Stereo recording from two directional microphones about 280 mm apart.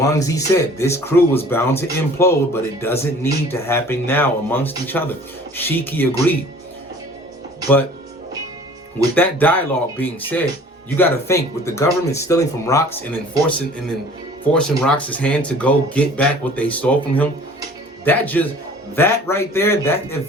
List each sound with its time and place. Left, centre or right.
0.0 s speech: centre
9.1 s speech: centre
14.5 s speech: centre